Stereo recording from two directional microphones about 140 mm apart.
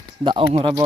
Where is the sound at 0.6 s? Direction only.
30° right (ahead or behind).